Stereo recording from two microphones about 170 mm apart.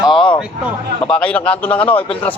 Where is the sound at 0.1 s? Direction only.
30° left (ahead or behind).